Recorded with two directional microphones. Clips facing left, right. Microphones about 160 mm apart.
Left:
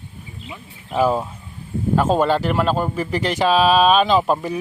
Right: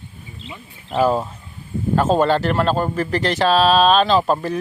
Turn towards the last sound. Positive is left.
turn(degrees=10)  # may be behind; listen again after turning